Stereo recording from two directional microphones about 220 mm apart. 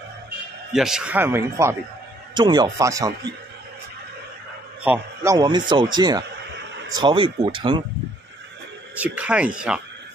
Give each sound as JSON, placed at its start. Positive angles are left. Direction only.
{"t": 0.7, "sound": "speech", "side_deg": 0}
{"t": 4.8, "sound": "a man's voice", "side_deg": -10}
{"t": 8.9, "sound": "speech", "side_deg": -5}